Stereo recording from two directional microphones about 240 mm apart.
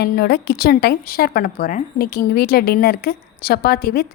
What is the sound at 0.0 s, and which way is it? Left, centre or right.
A woman's voice, left.